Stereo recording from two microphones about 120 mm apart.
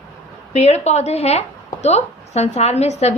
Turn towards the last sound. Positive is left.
turn(degrees=65)  # may be behind; listen again after turning